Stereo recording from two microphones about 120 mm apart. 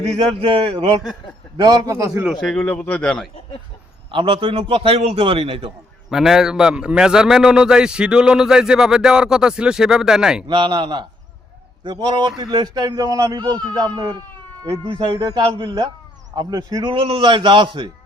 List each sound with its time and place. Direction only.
0.2 s a man's voice: 45° right (ahead or behind)
1.5 s a man's voice: 35° right (ahead or behind)
2.4 s a man's voice: 5° left (ahead or behind)
4.1 s a man's voice: 45° right (ahead or behind)
6.1 s a man's voice: 5° right (ahead or behind)
10.4 s a man's voice: 40° right (ahead or behind)
14.7 s a man's voice: 50° right (ahead or behind)
15.1 s a man's voice: 30° right (ahead or behind)
15.4 s a man's voice: 45° right (ahead or behind)
16.9 s a man's voice: 50° right (ahead or behind)